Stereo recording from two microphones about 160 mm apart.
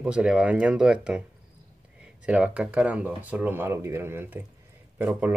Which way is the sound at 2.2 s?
5° right (ahead or behind).